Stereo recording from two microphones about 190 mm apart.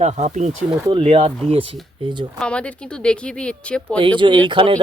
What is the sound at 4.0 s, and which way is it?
Speech, 25° right (ahead or behind).